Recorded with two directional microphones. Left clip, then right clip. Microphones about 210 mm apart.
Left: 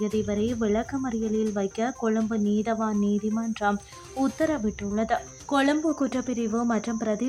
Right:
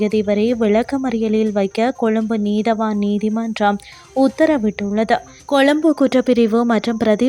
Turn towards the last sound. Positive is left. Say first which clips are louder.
# right 11 dB
turn(degrees=-35)  # may be behind; listen again after turning